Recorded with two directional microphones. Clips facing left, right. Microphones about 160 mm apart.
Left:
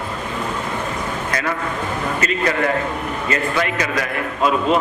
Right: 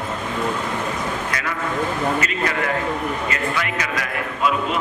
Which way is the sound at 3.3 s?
35° left (ahead or behind).